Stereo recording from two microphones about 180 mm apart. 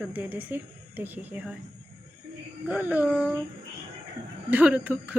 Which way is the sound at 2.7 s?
10° right (ahead or behind).